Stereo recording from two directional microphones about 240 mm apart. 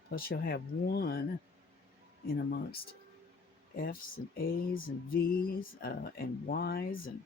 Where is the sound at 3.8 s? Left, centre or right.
Left.